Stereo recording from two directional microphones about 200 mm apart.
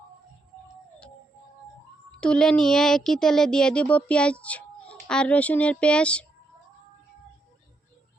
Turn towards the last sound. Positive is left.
turn(degrees=5)  # may be behind; listen again after turning